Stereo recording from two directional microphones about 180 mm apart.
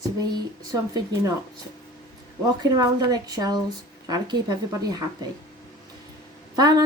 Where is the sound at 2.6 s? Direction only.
20° right (ahead or behind).